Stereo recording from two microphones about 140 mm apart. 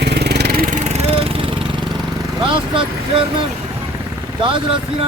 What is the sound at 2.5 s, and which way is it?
Speech, 40° right (ahead or behind).